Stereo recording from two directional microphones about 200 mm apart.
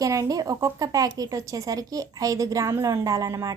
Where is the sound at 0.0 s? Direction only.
15° right (ahead or behind).